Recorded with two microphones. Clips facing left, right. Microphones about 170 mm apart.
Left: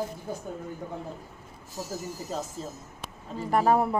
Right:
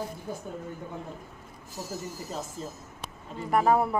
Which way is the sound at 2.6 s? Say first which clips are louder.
Left 1 dB; 35° left (ahead or behind).